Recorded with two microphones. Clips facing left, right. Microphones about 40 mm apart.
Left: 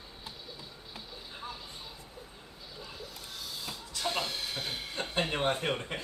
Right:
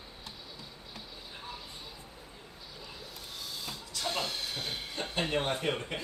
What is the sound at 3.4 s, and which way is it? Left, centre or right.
Printer, centre.